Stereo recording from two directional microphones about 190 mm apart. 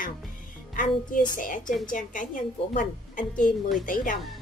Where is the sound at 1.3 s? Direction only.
45° left (ahead or behind).